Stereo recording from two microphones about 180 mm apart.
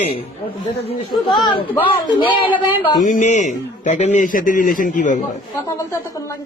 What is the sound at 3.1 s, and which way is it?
A man's voice, 40° left (ahead or behind).